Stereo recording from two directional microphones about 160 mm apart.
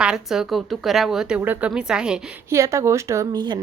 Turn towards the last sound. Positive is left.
turn(degrees=-30)  # may be behind; listen again after turning